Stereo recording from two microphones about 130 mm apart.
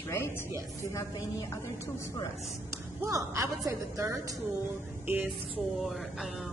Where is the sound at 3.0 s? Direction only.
25° right (ahead or behind).